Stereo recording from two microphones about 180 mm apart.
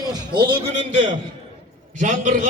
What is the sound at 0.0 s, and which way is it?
Speech, 25° right (ahead or behind).